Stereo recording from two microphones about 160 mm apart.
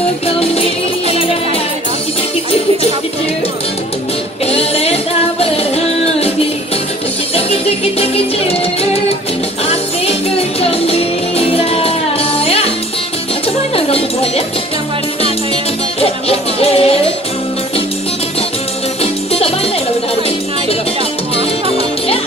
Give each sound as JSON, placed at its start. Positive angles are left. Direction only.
{"t": 0.4, "sound": "music", "side_deg": 40}
{"t": 4.5, "sound": "music", "side_deg": 40}
{"t": 7.3, "sound": "music", "side_deg": 40}
{"t": 10.6, "sound": "music", "side_deg": 40}
{"t": 13.7, "sound": "music", "side_deg": 35}
{"t": 16.0, "sound": "music", "side_deg": 40}